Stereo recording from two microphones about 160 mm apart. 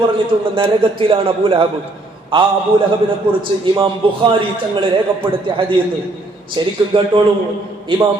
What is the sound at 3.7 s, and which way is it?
A man's voice, 30° right (ahead or behind).